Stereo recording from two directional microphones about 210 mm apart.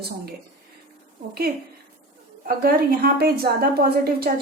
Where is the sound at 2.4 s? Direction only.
45° right (ahead or behind).